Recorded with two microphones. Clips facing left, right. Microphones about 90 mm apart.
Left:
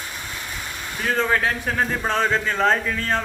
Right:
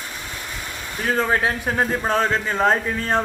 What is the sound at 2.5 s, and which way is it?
Speech, 15° right (ahead or behind).